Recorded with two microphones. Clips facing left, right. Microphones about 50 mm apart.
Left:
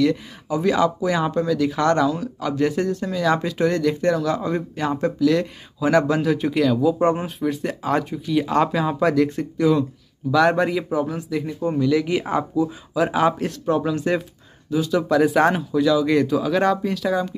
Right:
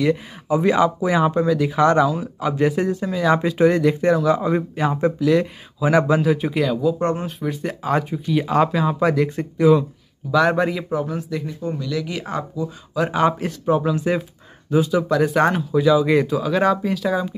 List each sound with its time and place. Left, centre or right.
0.0 s speech: centre
11.6 s speech: centre
12.9 s speech: centre
15.7 s speech: centre